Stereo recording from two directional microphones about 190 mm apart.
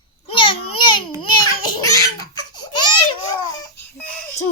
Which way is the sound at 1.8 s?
20° left (ahead or behind).